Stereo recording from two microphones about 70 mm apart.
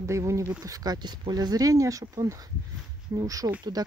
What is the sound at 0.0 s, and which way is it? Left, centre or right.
Speech, right.